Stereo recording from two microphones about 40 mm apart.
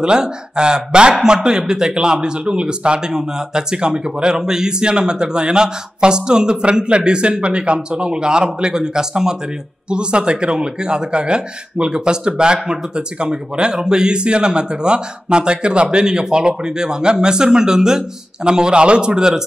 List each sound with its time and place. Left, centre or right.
0.0 s speech: right